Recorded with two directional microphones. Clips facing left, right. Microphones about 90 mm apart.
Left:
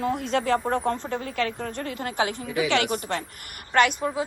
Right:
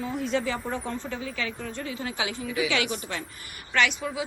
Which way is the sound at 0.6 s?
60° left (ahead or behind).